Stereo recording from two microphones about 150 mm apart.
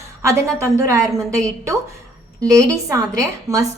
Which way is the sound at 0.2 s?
20° right (ahead or behind).